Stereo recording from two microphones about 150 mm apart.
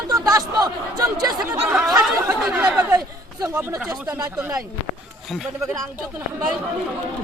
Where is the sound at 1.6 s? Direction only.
5° right (ahead or behind).